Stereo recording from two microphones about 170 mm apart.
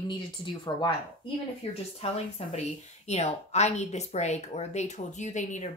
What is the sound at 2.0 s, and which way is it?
A woman's voice, 40° left (ahead or behind).